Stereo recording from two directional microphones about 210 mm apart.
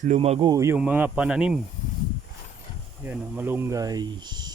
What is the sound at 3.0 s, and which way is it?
Speech, 10° right (ahead or behind).